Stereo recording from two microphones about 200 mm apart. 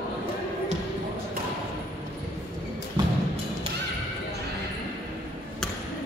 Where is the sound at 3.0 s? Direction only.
20° right (ahead or behind).